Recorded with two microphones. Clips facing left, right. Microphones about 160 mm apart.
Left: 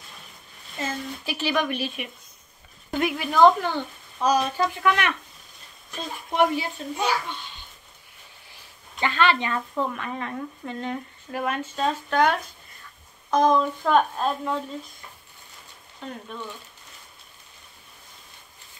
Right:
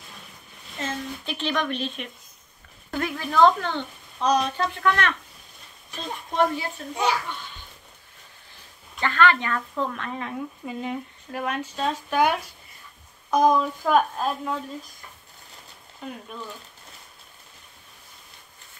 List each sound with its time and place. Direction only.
0.7 s a woman's voice: 5° left (ahead or behind)
6.3 s a woman's voice: 15° left (ahead or behind)
9.0 s speech: 20° left (ahead or behind)
9.8 s speech: 5° left (ahead or behind)
16.0 s speech: 5° right (ahead or behind)